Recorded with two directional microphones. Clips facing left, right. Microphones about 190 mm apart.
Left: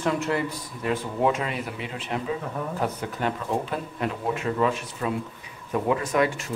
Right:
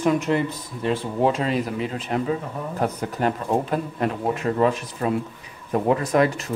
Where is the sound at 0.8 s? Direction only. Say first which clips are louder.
Right 3 dB; 30° right (ahead or behind).